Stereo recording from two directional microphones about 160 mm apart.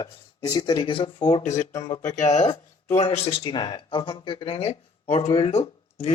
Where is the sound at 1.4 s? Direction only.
45° left (ahead or behind).